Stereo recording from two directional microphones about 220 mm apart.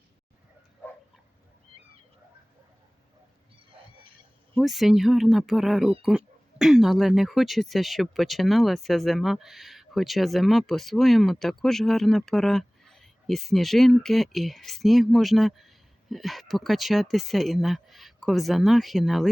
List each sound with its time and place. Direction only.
4.5 s speech: centre (ahead or behind)